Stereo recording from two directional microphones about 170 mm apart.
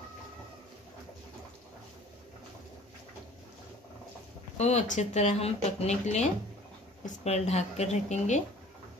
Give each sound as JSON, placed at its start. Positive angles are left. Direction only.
{"t": 4.6, "sound": "speech", "side_deg": 40}